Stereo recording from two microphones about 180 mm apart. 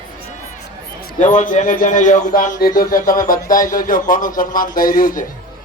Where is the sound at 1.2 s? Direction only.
45° left (ahead or behind).